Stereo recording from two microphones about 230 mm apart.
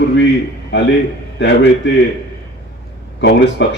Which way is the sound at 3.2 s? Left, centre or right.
Left.